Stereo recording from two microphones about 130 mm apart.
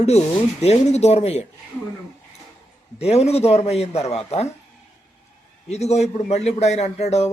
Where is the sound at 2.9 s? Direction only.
55° left (ahead or behind).